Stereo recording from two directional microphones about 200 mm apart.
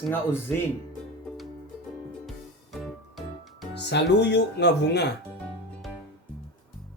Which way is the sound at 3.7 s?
60° left (ahead or behind).